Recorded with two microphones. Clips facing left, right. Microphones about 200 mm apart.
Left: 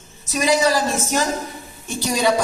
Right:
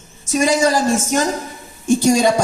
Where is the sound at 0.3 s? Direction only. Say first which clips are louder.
Right 2 dB; 45° right (ahead or behind).